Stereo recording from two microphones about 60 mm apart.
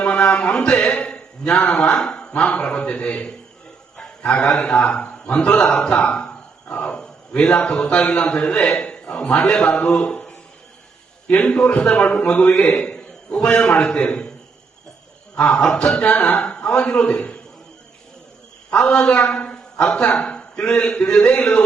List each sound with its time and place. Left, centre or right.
0.0 s a man's voice: left
3.9 s music: centre
4.5 s a man's voice: centre
15.4 s a man's voice: centre
18.7 s a man's voice: centre